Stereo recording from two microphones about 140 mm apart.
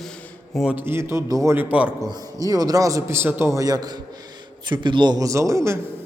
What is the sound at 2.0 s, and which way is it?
A man's voice, 30° right (ahead or behind).